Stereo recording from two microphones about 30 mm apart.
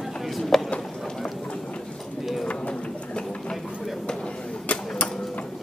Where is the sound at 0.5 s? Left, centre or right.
Centre.